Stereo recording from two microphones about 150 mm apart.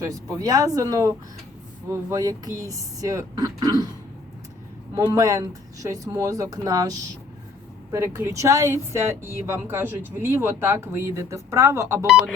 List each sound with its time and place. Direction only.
0.0 s speech: 25° right (ahead or behind)
5.1 s speech: 25° right (ahead or behind)
7.9 s speech: 20° right (ahead or behind)
12.0 s speech: 5° right (ahead or behind)